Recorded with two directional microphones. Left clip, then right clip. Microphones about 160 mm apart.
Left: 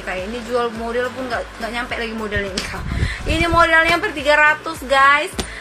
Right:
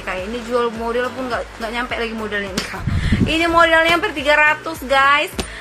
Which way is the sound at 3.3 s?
20° right (ahead or behind).